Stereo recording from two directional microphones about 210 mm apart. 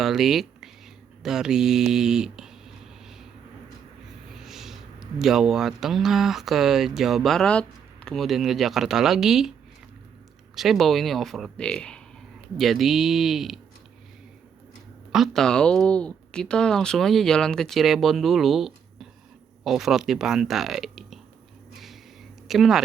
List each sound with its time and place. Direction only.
0.0 s a sound: centre (ahead or behind)
4.4 s speech: centre (ahead or behind)
15.1 s speech: centre (ahead or behind)
22.4 s speech: centre (ahead or behind)